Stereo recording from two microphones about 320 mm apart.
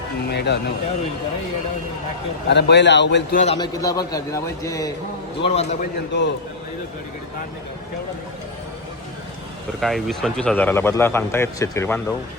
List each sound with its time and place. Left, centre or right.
0.3 s a man's voice: left
2.5 s a man's voice: left
3.4 s a man's voice: centre
9.8 s speech: centre